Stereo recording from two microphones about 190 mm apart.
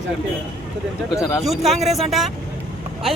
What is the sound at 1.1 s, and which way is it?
Speech, 15° left (ahead or behind).